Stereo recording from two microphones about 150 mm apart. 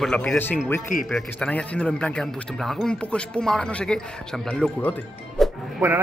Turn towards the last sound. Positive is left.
turn(degrees=-20)  # may be behind; listen again after turning